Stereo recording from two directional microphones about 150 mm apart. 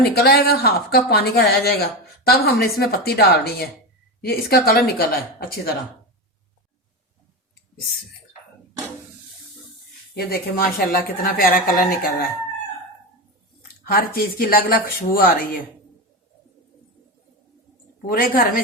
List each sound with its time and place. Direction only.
0.1 s speech: 90° left
10.2 s speech: 90° left
13.8 s speech: 75° left (ahead or behind)
18.0 s speech: 75° left (ahead or behind)